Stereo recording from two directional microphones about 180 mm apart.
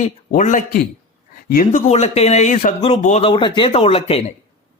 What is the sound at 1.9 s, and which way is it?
A man's voice, 35° left (ahead or behind).